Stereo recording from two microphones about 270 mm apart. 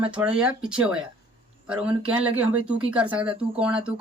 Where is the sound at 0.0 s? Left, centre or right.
Centre.